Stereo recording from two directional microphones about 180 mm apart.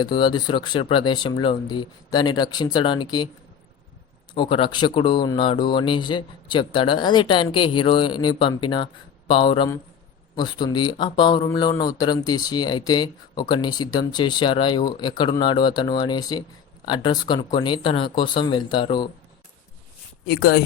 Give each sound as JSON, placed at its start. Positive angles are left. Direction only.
{"t": 0.0, "sound": "speech", "side_deg": 25}
{"t": 4.4, "sound": "speech", "side_deg": 30}
{"t": 20.2, "sound": "speech", "side_deg": 55}